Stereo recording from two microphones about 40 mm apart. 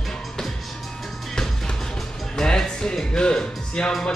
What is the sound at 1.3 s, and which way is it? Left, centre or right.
Music, centre.